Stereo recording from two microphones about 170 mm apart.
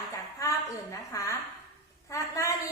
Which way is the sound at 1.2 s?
20° left (ahead or behind).